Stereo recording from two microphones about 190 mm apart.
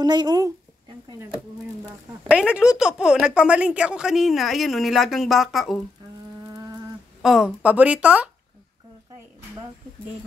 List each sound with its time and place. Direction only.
0.0 s speech: 20° right (ahead or behind)
2.2 s a woman's voice: 5° right (ahead or behind)
7.2 s speech: centre (ahead or behind)